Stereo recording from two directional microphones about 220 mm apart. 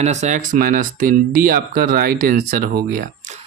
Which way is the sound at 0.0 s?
30° right (ahead or behind).